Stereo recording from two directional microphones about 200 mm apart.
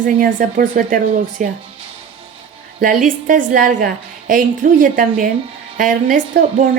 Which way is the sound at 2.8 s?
40° right (ahead or behind).